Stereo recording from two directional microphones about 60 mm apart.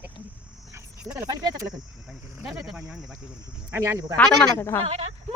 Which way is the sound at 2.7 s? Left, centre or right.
Centre.